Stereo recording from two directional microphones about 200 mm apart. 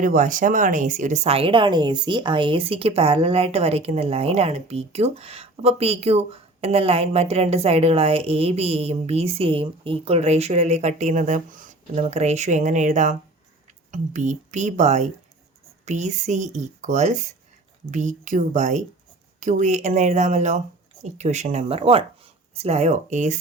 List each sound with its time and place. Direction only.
0.0 s speech: 40° right (ahead or behind)